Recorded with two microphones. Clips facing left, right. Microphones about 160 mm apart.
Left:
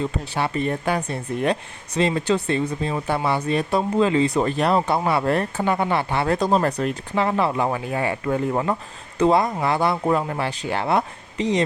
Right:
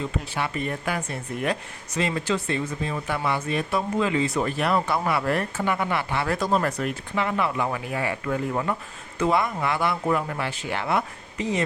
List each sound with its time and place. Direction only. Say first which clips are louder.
0.3 s speech: left 6 dB; 30° left (ahead or behind)